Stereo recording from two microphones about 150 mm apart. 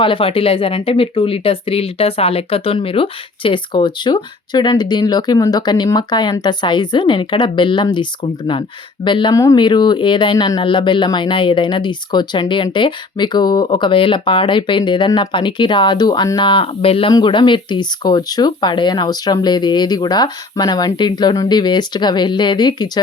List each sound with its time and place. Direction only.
0.0 s speech: 35° left (ahead or behind)
9.3 s speech: 20° left (ahead or behind)